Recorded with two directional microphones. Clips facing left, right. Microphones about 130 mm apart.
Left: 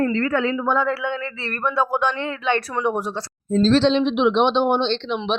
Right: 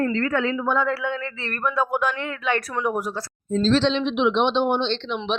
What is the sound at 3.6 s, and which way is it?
Speech, 40° left (ahead or behind).